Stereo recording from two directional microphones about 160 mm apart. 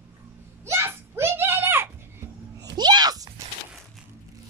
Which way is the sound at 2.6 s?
25° right (ahead or behind).